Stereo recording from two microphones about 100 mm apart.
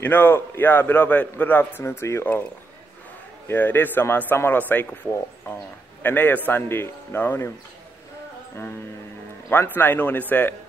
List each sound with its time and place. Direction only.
0.0 s a man's voice: 20° left (ahead or behind)
3.4 s a man's voice: 20° left (ahead or behind)
9.5 s a man's voice: 20° left (ahead or behind)